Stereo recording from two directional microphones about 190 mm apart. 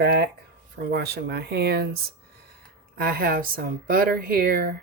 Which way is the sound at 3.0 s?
55° right (ahead or behind).